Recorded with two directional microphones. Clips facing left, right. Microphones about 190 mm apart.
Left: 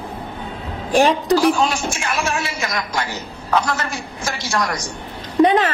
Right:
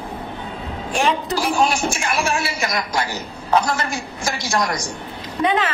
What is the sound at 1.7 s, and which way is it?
A man's voice, 10° right (ahead or behind).